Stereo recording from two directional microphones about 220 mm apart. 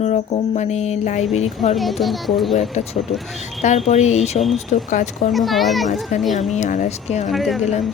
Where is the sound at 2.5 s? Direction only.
30° left (ahead or behind).